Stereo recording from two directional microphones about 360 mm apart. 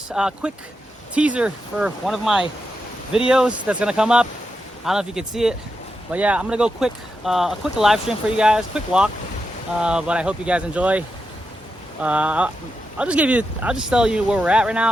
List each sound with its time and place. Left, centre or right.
0.1 s speech: centre
12.0 s speech: centre